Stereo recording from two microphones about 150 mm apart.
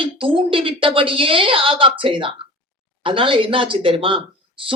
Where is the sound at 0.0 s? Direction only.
35° right (ahead or behind).